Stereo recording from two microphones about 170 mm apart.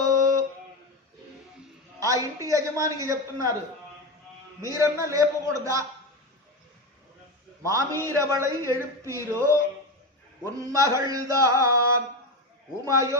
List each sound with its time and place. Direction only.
0.0 s a sound: 20° right (ahead or behind)
2.0 s a woman's voice: 20° right (ahead or behind)
4.6 s a man's voice: 15° right (ahead or behind)
7.6 s a man's voice: 20° right (ahead or behind)
10.6 s a man's voice: 20° right (ahead or behind)
12.8 s a man's voice: 20° right (ahead or behind)